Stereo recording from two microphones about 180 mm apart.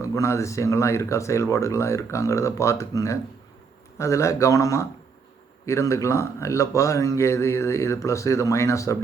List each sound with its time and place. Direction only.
0.0 s speech: 15° left (ahead or behind)